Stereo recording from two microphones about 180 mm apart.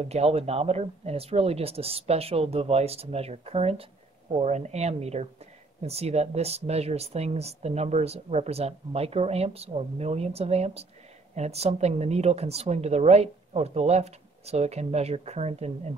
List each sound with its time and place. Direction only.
0.0 s speech: 35° right (ahead or behind)